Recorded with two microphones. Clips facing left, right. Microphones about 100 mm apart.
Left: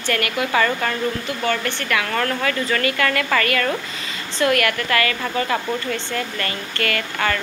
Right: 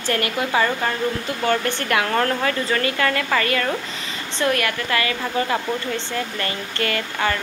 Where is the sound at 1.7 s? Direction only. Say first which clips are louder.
Right 2 dB; 40° right (ahead or behind).